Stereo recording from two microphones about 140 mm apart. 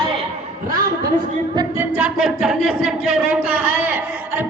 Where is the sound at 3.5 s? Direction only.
15° right (ahead or behind).